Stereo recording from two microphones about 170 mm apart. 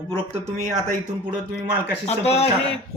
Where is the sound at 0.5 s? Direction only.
45° right (ahead or behind).